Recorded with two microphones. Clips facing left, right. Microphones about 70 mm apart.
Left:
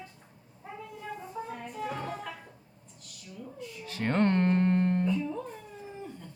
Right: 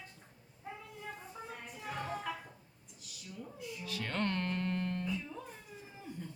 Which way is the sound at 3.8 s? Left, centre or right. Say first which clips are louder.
Left 9 dB; left.